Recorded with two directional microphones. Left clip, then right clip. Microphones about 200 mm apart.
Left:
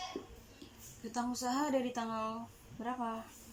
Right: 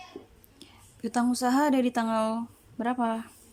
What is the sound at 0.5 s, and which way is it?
A woman's voice, 55° right (ahead or behind).